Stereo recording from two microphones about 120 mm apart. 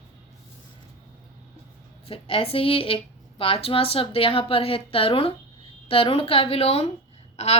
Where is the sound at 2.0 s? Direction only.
50° left (ahead or behind).